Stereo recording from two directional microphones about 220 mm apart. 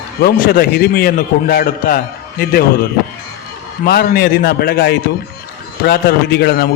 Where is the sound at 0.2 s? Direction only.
45° left (ahead or behind).